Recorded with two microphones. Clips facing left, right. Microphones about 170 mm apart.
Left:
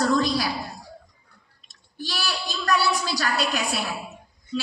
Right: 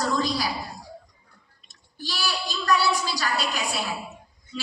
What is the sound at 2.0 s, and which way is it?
A woman's voice, 50° left (ahead or behind).